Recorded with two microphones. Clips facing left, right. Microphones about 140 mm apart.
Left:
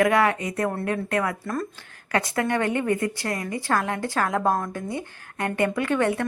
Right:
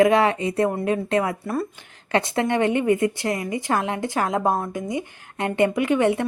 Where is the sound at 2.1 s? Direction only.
20° right (ahead or behind).